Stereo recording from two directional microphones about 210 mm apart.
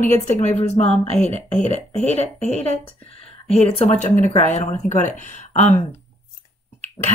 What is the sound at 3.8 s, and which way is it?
Speech, 35° left (ahead or behind).